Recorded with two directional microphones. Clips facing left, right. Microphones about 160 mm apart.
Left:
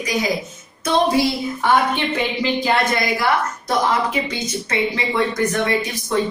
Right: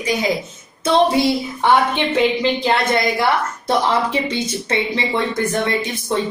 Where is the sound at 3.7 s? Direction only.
30° right (ahead or behind).